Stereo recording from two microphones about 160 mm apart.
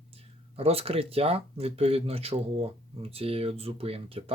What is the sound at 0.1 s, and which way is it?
Speech, 40° right (ahead or behind).